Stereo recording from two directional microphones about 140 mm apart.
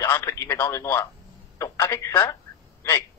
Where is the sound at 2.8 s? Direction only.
15° left (ahead or behind).